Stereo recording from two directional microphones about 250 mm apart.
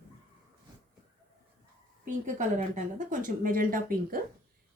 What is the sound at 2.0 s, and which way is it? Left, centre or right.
Speech, right.